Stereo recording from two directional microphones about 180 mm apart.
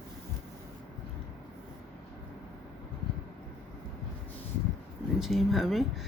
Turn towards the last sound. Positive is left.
turn(degrees=0)  # may be behind; listen again after turning